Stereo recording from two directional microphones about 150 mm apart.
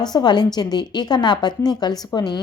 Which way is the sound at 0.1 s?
30° left (ahead or behind).